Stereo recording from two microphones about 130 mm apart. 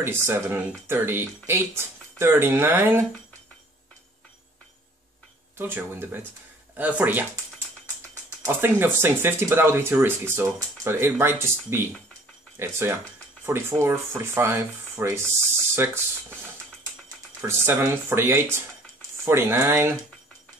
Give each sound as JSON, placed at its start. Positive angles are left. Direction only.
{"t": 0.0, "sound": "speech", "side_deg": -20}
{"t": 5.6, "sound": "speech", "side_deg": -15}
{"t": 17.4, "sound": "speech", "side_deg": -20}